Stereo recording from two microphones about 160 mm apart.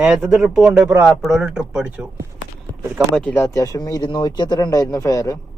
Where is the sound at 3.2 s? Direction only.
10° left (ahead or behind).